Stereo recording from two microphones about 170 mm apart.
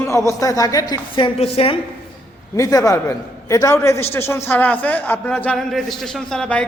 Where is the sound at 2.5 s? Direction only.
20° left (ahead or behind).